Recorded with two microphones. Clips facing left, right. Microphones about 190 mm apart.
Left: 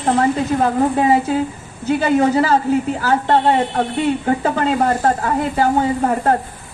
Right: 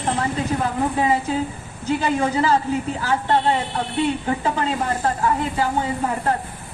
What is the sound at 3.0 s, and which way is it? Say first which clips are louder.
A woman's voice: left 4 dB; 55° left (ahead or behind).